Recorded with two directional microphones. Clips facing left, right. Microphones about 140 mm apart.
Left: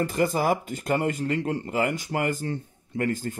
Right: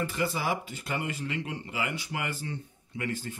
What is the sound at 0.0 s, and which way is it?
Speech, 45° left (ahead or behind).